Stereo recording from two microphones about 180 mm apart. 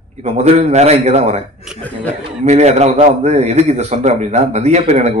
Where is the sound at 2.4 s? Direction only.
35° right (ahead or behind).